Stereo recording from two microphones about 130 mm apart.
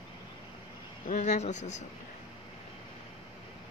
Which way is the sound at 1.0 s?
70° left (ahead or behind).